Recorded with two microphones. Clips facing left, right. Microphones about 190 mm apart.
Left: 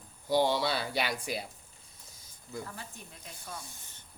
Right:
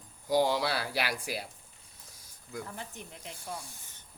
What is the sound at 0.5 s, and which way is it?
Speech, 10° right (ahead or behind).